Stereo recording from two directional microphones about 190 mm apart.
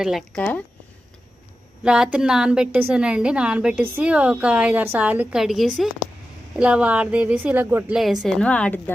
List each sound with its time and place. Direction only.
0.0 s a woman's voice: centre (ahead or behind)
1.8 s a woman's voice: 5° right (ahead or behind)